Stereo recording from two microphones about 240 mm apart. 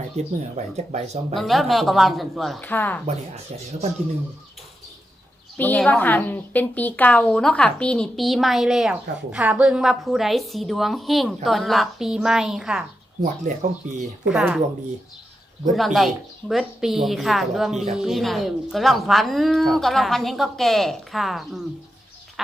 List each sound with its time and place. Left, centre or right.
0.2 s speech: right
1.4 s a woman's voice: centre
5.5 s a woman's voice: centre
13.2 s speech: right
14.3 s a woman's voice: centre
15.7 s a woman's voice: centre